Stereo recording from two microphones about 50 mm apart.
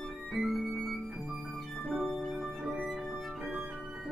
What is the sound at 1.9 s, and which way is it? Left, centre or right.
Music, centre.